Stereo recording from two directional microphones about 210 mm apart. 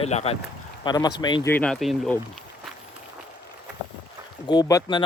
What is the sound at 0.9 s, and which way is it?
Speech, 20° left (ahead or behind).